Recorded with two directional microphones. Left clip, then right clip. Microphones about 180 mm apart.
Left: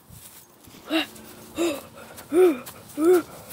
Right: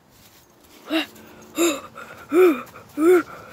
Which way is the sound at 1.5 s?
30° right (ahead or behind).